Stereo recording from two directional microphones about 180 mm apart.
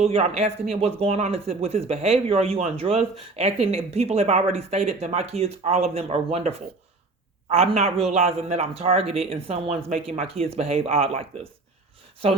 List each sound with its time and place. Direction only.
0.0 s speech: 35° right (ahead or behind)
7.8 s speech: 35° right (ahead or behind)